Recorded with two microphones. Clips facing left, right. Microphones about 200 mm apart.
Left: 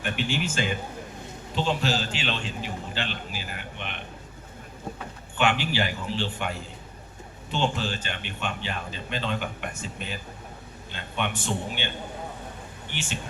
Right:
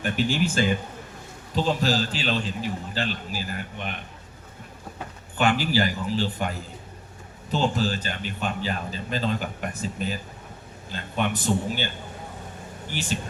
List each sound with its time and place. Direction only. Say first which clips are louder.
0.0 s a man's voice: right 4 dB; 40° right (ahead or behind)
5.4 s a man's voice: right 3 dB; 40° right (ahead or behind)
7.5 s a man's voice: right 3 dB; 40° right (ahead or behind)
12.9 s speech: right 5 dB; 40° right (ahead or behind)